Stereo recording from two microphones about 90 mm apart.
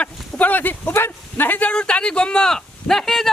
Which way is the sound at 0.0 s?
15° left (ahead or behind).